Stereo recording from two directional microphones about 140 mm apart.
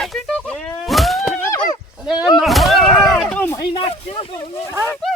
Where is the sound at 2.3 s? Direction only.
Centre (ahead or behind).